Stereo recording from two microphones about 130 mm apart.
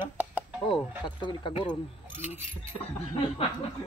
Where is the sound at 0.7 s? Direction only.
35° left (ahead or behind).